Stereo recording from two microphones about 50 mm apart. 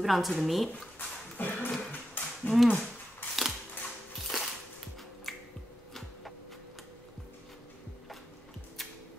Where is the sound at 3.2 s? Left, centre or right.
Left.